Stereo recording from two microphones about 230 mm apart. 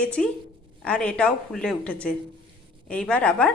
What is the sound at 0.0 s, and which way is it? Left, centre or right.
A woman's voice, centre.